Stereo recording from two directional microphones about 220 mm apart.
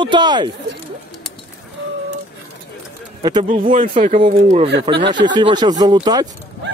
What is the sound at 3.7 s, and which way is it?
Speech, 35° right (ahead or behind).